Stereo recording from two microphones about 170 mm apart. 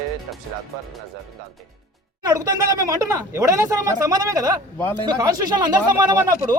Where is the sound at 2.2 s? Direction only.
20° right (ahead or behind).